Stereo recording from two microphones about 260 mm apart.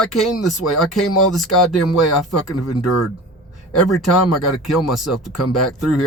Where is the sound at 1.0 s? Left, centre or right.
Left.